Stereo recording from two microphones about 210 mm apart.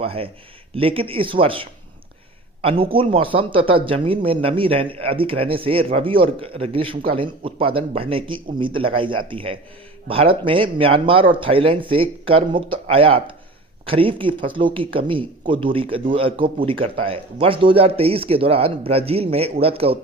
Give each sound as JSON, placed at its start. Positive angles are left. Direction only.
{"t": 0.0, "sound": "a man's voice", "side_deg": -25}